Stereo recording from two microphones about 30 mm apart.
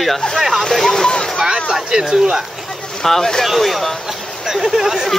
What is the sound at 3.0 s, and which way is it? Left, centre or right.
Speech, centre.